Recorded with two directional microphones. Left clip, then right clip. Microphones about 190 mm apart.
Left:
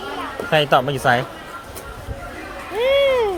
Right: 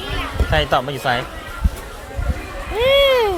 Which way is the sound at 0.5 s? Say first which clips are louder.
Left 2 dB; 25° left (ahead or behind).